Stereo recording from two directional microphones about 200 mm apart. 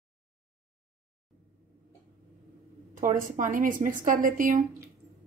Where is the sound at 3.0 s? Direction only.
40° right (ahead or behind).